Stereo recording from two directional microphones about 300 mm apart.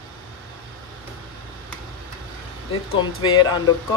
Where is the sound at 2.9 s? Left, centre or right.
Centre.